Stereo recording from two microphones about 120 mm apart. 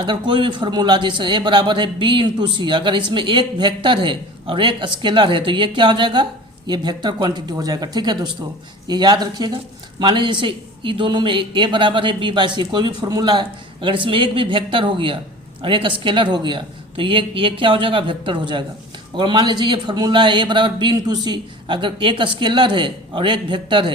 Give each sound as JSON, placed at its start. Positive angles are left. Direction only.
{"t": 0.0, "sound": "a man's voice", "side_deg": -40}